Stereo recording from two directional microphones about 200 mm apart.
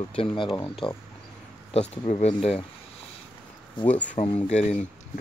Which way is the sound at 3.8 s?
25° left (ahead or behind).